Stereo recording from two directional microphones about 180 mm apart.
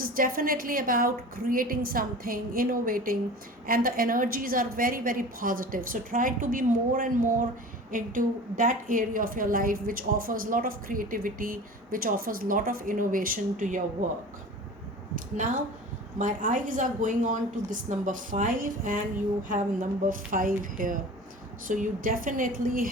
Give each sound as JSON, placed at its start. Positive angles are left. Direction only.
{"t": 0.0, "sound": "a woman's voice", "side_deg": -50}
{"t": 16.1, "sound": "a woman's voice", "side_deg": -45}